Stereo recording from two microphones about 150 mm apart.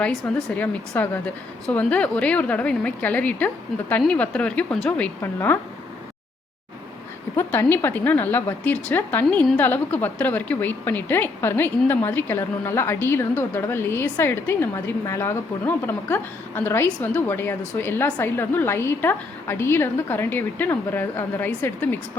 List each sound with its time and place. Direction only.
0.3 s a woman's voice: 5° left (ahead or behind)
7.3 s a woman's voice: 15° left (ahead or behind)